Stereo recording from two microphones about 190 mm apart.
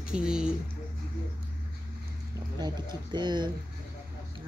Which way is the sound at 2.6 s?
25° right (ahead or behind).